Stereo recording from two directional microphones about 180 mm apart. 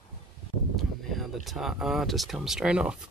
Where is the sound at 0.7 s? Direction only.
Centre (ahead or behind).